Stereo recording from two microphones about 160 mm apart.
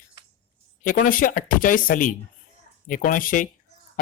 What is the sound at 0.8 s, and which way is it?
A man's voice, 60° left (ahead or behind).